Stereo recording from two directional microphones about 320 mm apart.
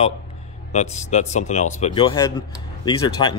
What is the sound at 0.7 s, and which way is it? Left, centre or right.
Speech, left.